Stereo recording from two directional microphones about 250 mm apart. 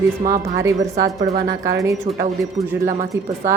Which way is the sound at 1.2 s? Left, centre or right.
Right.